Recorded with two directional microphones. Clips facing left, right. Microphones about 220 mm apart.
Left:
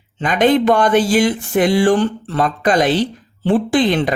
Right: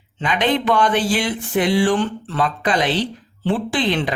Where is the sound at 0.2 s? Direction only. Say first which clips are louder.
Left 6 dB; 45° left (ahead or behind).